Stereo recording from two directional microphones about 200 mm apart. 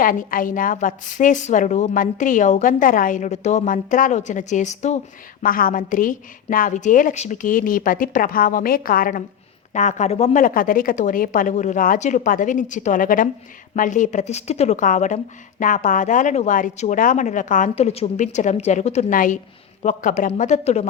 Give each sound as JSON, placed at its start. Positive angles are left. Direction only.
{"t": 0.0, "sound": "a woman's voice", "side_deg": 45}